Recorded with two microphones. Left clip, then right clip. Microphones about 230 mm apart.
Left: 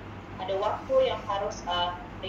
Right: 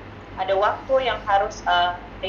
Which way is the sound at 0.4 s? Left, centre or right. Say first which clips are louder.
Right 8 dB; centre.